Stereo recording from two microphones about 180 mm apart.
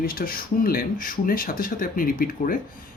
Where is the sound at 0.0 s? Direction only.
55° left (ahead or behind).